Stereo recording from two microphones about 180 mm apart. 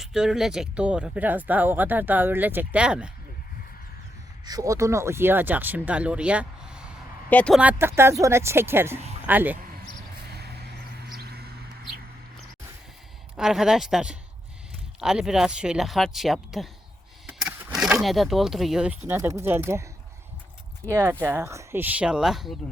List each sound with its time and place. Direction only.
0.0 s speech: centre (ahead or behind)
4.4 s speech: 20° right (ahead or behind)
7.3 s speech: 5° left (ahead or behind)
7.6 s speech: 10° right (ahead or behind)
10.3 s vehicle: 65° right (ahead or behind)
11.1 s a sound: 60° right (ahead or behind)
13.3 s speech: 5° right (ahead or behind)
17.4 s a sound: centre (ahead or behind)
18.0 s speech: centre (ahead or behind)
20.8 s speech: 15° right (ahead or behind)